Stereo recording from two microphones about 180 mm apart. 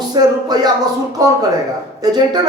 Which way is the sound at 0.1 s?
20° right (ahead or behind).